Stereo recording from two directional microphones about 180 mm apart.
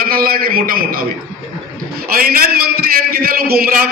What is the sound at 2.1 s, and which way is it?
A man's voice, 55° right (ahead or behind).